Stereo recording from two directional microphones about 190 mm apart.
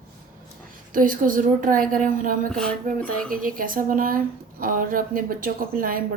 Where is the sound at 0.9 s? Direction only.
45° right (ahead or behind).